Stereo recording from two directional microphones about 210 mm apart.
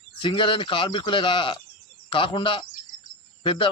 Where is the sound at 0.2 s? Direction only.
25° left (ahead or behind).